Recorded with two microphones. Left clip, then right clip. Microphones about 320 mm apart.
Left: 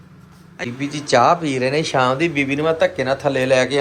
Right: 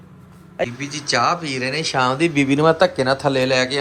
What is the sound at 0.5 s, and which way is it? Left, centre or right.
A man's voice, centre.